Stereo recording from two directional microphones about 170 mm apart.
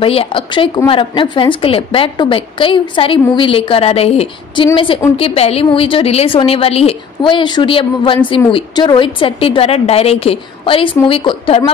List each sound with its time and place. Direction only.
0.0 s a woman's voice: 35° left (ahead or behind)